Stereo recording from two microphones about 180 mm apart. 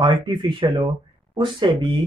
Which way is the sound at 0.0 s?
30° right (ahead or behind).